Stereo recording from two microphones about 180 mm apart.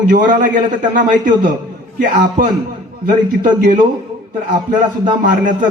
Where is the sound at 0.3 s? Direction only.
45° right (ahead or behind).